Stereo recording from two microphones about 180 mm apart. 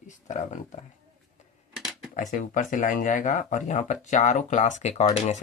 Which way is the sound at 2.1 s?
45° left (ahead or behind).